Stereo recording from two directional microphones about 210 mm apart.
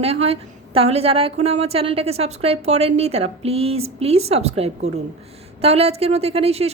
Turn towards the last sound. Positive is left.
turn(degrees=-30)  # may be behind; listen again after turning